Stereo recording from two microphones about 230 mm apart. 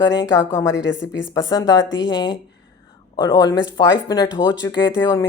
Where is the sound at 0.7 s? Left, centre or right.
Left.